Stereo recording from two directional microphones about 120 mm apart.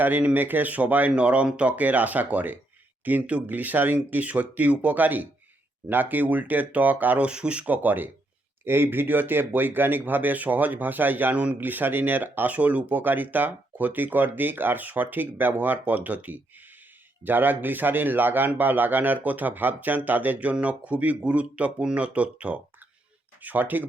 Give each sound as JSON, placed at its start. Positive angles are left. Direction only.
{"t": 0.0, "sound": "speech", "side_deg": -15}